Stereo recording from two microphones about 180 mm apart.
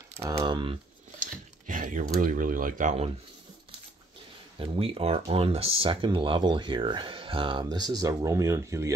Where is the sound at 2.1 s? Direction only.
50° right (ahead or behind).